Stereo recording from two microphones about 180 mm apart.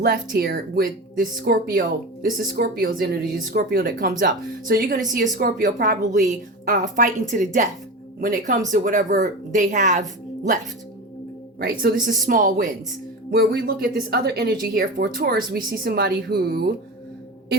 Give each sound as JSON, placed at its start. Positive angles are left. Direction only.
{"t": 0.0, "sound": "speech", "side_deg": -55}
{"t": 11.6, "sound": "speech", "side_deg": -60}
{"t": 13.3, "sound": "speech", "side_deg": -65}